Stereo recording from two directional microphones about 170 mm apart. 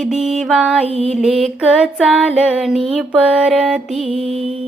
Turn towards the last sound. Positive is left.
turn(degrees=0)  # may be behind; listen again after turning